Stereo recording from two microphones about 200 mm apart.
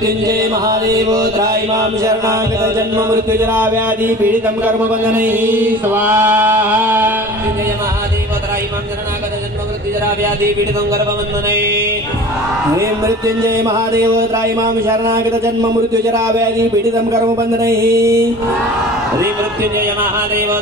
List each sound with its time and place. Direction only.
0.7 s music: 20° right (ahead or behind)
13.0 s music: 15° right (ahead or behind)
14.9 s music: 15° right (ahead or behind)